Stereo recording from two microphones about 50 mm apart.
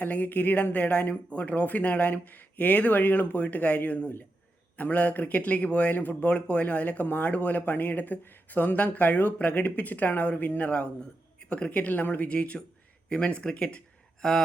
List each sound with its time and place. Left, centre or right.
0.0 s speech: left
14.2 s speech: centre